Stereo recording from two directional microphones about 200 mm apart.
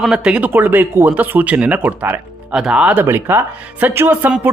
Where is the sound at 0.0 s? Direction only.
5° right (ahead or behind).